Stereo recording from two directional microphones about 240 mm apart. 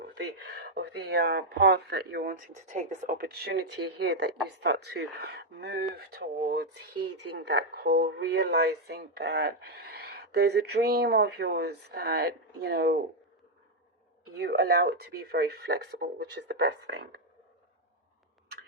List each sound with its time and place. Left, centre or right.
0.1 s speech: right
14.3 s speech: right